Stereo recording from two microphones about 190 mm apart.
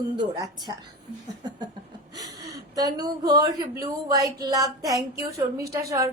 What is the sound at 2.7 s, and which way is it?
A woman's voice, 20° right (ahead or behind).